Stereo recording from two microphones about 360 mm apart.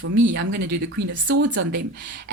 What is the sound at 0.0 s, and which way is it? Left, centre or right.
Speech, right.